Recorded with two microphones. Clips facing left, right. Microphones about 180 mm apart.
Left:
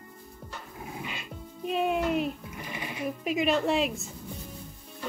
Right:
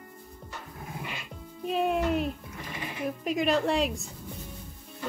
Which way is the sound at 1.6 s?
Centre (ahead or behind).